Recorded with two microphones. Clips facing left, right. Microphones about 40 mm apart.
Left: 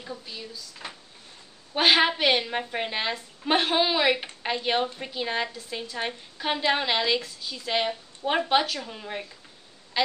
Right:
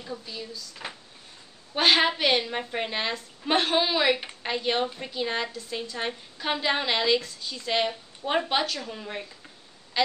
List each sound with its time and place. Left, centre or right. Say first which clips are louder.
0.0 s a woman's voice: right 1 dB; centre
0.8 s a sound: right 2 dB; centre
1.8 s a woman's voice: left 1 dB; centre
9.9 s quack: even; centre